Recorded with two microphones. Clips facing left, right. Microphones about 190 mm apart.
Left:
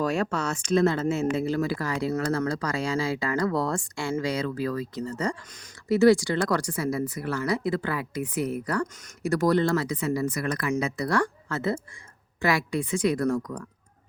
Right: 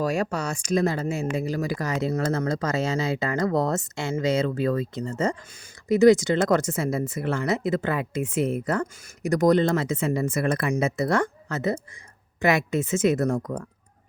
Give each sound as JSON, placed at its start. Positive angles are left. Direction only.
{"t": 0.0, "sound": "speech", "side_deg": -10}